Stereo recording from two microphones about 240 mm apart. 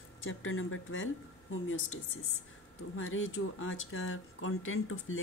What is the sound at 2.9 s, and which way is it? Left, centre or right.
Speech, left.